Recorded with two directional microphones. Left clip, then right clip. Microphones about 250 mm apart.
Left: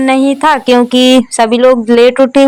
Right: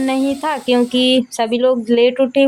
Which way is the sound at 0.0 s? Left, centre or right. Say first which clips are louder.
Left 9 dB; centre.